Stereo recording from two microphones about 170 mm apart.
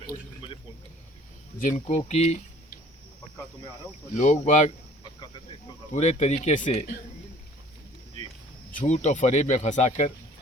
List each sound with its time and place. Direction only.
1.5 s speech: 45° left (ahead or behind)
4.2 s speech: 45° left (ahead or behind)
5.9 s speech: 45° left (ahead or behind)
8.7 s speech: 40° left (ahead or behind)